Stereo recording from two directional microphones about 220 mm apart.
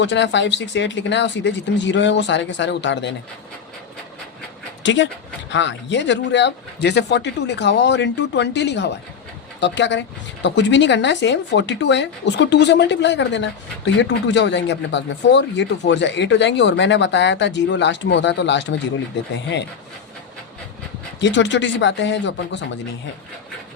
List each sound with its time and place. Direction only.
0.0 s speech: 55° left (ahead or behind)
4.8 s speech: 55° left (ahead or behind)
21.2 s speech: 55° left (ahead or behind)